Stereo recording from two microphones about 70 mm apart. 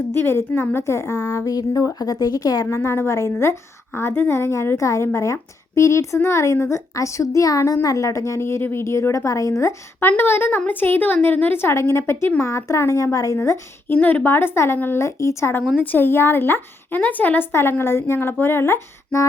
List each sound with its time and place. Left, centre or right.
0.1 s a woman's voice: left
1.5 s a woman's voice: left
2.6 s a woman's voice: left
10.1 s a woman's voice: left
13.8 s a woman's voice: left
15.0 s a woman's voice: left
15.8 s a woman's voice: left